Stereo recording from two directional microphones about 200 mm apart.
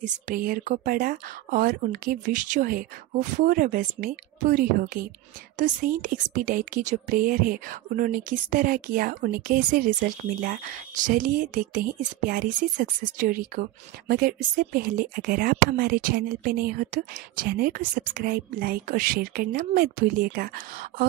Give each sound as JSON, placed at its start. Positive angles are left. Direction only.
{"t": 0.0, "sound": "a woman's voice", "side_deg": -45}